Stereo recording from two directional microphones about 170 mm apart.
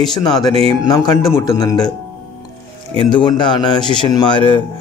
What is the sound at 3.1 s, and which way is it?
Speech, 25° left (ahead or behind).